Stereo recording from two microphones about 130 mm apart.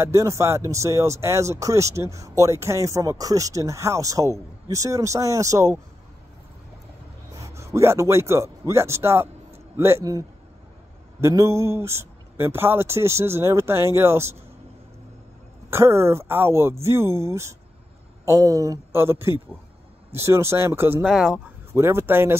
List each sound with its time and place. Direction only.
0.0 s speech: 25° right (ahead or behind)
7.4 s speech: 25° right (ahead or behind)
15.7 s speech: 20° right (ahead or behind)
21.0 s speech: 5° right (ahead or behind)
21.7 s speech: 20° right (ahead or behind)